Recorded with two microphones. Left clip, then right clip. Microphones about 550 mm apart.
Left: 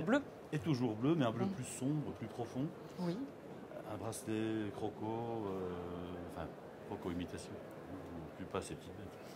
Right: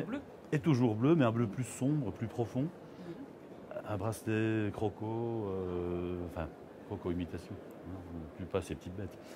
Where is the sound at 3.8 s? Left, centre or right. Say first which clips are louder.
Right 6 dB; right.